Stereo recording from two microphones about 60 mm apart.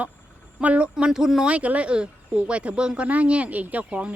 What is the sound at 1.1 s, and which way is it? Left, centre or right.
Speech, centre.